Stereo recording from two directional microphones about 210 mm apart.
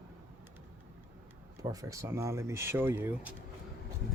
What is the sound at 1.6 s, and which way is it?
Speech, 15° right (ahead or behind).